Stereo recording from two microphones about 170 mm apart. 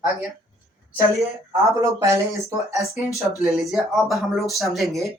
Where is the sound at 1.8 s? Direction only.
20° right (ahead or behind).